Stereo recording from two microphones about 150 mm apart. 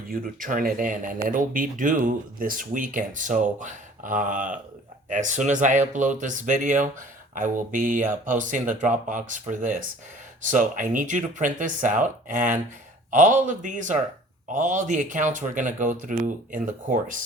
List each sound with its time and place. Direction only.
0.1 s speech: 70° right (ahead or behind)